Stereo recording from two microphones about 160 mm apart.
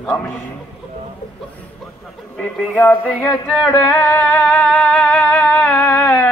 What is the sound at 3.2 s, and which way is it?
Music, 10° left (ahead or behind).